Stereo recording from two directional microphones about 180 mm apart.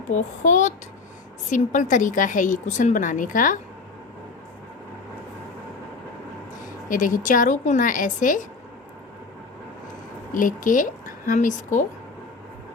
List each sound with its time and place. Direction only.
0.1 s a child's voice: 40° left (ahead or behind)
6.8 s a woman's voice: 45° left (ahead or behind)
10.3 s a woman's voice: 50° left (ahead or behind)